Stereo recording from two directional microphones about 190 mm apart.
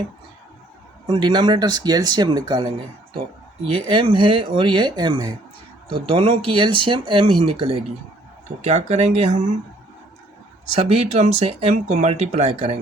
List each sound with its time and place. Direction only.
1.0 s speech: 25° right (ahead or behind)
3.8 s speech: 25° right (ahead or behind)
10.8 s speech: 35° right (ahead or behind)